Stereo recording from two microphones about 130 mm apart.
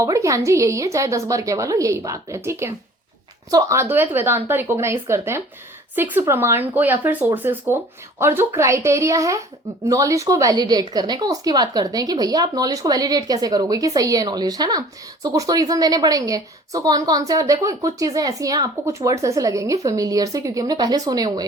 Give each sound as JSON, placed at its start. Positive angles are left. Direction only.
{"t": 0.0, "sound": "a woman's voice", "side_deg": -25}